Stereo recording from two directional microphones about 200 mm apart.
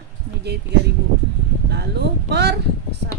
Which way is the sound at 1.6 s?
55° right (ahead or behind).